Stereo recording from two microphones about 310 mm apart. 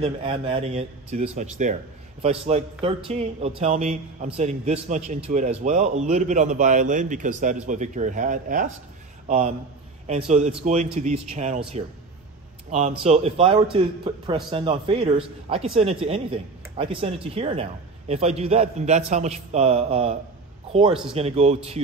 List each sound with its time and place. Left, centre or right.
0.0 s a man's voice: centre
10.0 s a man's voice: right
12.7 s a man's voice: right